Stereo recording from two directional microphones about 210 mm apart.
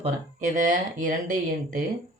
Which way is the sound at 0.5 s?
40° right (ahead or behind).